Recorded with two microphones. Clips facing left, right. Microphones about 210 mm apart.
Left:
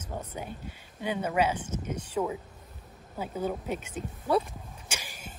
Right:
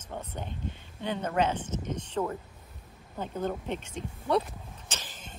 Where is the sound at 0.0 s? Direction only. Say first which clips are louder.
Left 1 dB; 10° left (ahead or behind).